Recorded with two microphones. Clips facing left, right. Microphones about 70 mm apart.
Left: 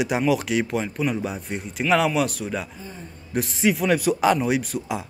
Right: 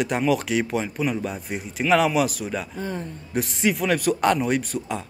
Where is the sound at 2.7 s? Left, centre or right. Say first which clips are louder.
Right 9 dB; right.